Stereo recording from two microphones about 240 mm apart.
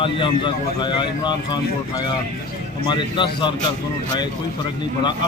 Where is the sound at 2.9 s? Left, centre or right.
Centre.